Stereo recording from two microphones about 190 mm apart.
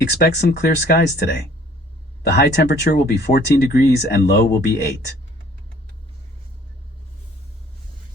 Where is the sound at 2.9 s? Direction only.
60° left (ahead or behind).